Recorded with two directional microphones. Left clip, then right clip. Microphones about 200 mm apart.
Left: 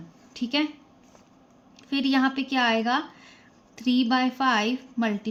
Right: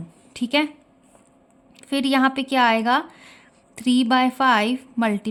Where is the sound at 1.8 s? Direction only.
50° right (ahead or behind).